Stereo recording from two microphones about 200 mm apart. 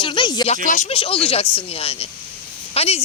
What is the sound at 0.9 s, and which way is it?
Speech, 25° left (ahead or behind).